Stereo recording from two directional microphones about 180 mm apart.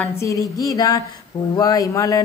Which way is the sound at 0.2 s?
20° left (ahead or behind).